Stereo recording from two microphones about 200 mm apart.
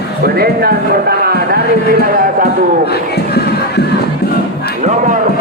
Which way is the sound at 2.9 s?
55° left (ahead or behind).